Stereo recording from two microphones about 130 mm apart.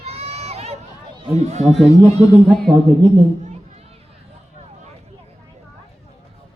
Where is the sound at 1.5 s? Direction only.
60° right (ahead or behind).